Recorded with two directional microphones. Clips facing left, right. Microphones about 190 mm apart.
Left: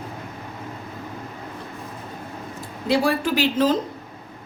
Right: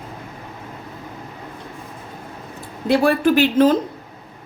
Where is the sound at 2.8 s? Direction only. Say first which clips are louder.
Right 5 dB; 55° right (ahead or behind).